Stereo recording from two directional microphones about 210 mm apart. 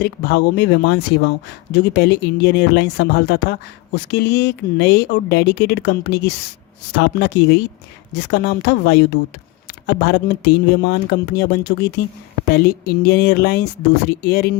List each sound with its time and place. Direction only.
0.0 s speech: 50° left (ahead or behind)